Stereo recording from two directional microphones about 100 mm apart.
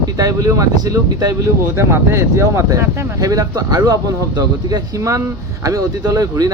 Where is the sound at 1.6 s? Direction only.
25° right (ahead or behind).